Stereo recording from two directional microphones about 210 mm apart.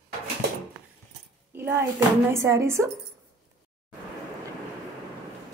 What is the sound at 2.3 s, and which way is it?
Speech, 15° right (ahead or behind).